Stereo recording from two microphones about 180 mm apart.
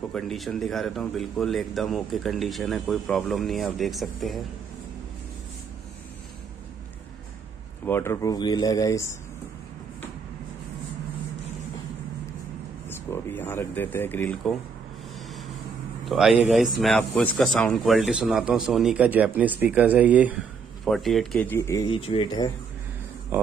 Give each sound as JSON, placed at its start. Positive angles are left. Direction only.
{"t": 0.1, "sound": "speech", "side_deg": 0}
{"t": 7.8, "sound": "speech", "side_deg": 15}
{"t": 12.8, "sound": "speech", "side_deg": 10}
{"t": 16.1, "sound": "speech", "side_deg": 0}
{"t": 23.3, "sound": "speech", "side_deg": -10}